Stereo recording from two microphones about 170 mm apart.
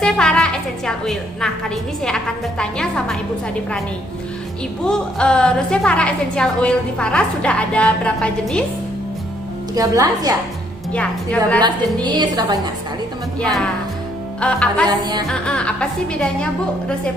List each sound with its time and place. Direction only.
0.0 s a woman's voice: 5° left (ahead or behind)
4.9 s a woman's voice: 5° left (ahead or behind)
9.7 s a woman's voice: 20° right (ahead or behind)
10.9 s a woman's voice: 5° left (ahead or behind)
12.0 s a woman's voice: 25° right (ahead or behind)
13.4 s a woman's voice: 5° left (ahead or behind)
14.8 s a woman's voice: 25° right (ahead or behind)
15.3 s a woman's voice: 5° left (ahead or behind)